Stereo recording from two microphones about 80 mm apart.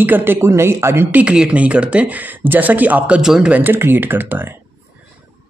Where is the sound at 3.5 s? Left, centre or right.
Right.